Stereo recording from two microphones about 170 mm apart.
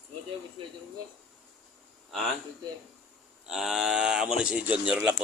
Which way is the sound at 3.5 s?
Centre (ahead or behind).